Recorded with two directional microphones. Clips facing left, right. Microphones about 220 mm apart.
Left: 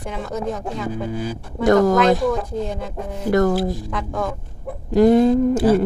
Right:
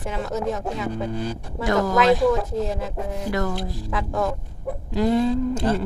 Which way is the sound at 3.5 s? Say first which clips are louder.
Left 6 dB; centre (ahead or behind).